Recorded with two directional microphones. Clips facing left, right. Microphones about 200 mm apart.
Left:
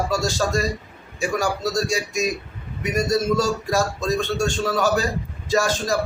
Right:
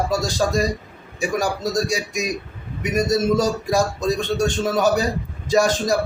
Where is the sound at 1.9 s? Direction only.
15° right (ahead or behind).